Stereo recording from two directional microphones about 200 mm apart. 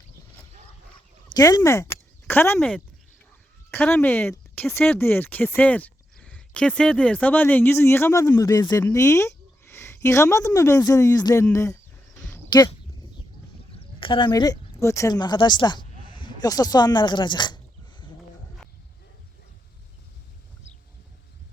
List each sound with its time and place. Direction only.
1.4 s speech: 15° left (ahead or behind)
12.5 s a sound: 20° left (ahead or behind)
13.7 s speech: 25° left (ahead or behind)